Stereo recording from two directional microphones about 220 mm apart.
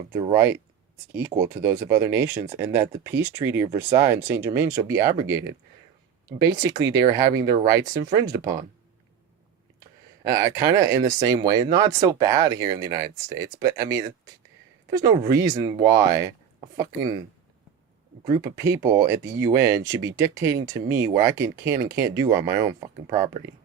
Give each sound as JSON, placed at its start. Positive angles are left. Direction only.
{"t": 0.1, "sound": "speech", "side_deg": -25}
{"t": 0.3, "sound": "speech", "side_deg": -10}
{"t": 9.8, "sound": "speech", "side_deg": -15}
{"t": 18.3, "sound": "speech", "side_deg": -15}